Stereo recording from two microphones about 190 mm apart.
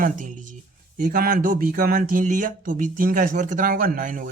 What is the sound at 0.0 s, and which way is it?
Speech, 45° right (ahead or behind).